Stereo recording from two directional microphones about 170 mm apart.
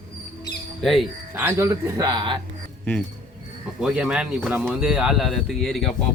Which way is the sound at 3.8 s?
5° right (ahead or behind).